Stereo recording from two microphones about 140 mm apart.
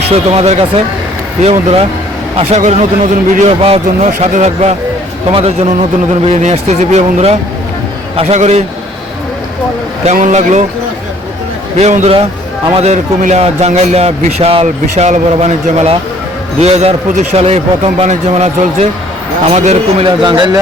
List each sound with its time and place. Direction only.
0.1 s a man's voice: 45° right (ahead or behind)
2.6 s a man's voice: 60° right (ahead or behind)
3.6 s a man's voice: 45° right (ahead or behind)
10.1 s a man's voice: 55° right (ahead or behind)
11.8 s a man's voice: 55° right (ahead or behind)
20.1 s a man's voice: 35° right (ahead or behind)